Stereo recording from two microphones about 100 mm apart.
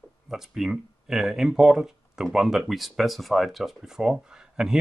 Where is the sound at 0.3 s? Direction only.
5° right (ahead or behind).